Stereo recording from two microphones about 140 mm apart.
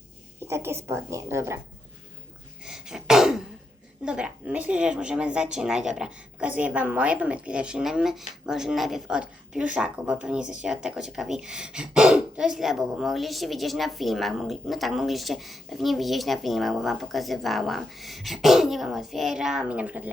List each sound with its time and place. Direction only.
0.4 s a woman's voice: 20° right (ahead or behind)
2.6 s throat clearing: 5° right (ahead or behind)
4.0 s speech: 5° right (ahead or behind)